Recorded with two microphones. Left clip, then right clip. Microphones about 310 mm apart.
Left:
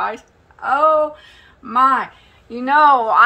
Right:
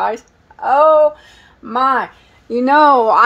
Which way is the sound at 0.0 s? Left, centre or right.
Right.